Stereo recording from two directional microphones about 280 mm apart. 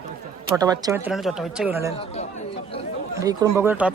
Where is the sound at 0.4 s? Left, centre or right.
Centre.